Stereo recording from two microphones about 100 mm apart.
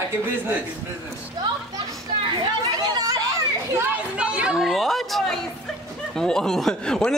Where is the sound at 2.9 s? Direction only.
40° right (ahead or behind).